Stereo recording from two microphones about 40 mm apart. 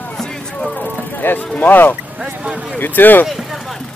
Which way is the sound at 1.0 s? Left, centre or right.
Left.